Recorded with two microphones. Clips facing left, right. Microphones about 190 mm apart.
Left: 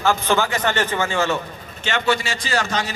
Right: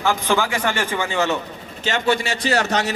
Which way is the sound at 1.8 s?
45° right (ahead or behind).